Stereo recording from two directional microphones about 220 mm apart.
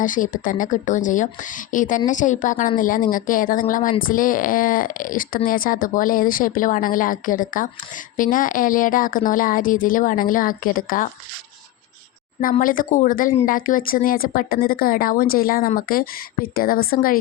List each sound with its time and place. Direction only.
0.0 s a woman's voice: 35° left (ahead or behind)
12.4 s a woman's voice: 40° left (ahead or behind)